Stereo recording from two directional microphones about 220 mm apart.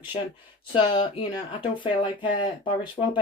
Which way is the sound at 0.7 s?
25° left (ahead or behind).